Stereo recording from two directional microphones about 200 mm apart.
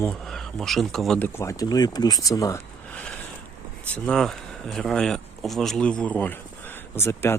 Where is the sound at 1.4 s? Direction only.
15° left (ahead or behind).